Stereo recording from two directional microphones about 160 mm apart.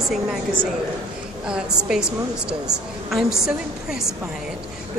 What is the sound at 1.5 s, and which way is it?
A woman's voice, 5° right (ahead or behind).